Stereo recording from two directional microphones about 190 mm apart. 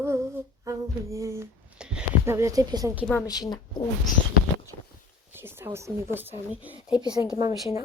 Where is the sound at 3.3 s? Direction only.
20° left (ahead or behind).